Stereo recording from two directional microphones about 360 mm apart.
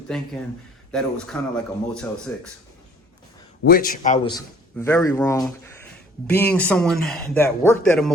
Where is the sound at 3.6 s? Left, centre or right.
Left; by 5.5 s centre.